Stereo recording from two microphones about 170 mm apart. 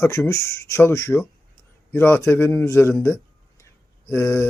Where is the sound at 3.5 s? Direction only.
15° left (ahead or behind).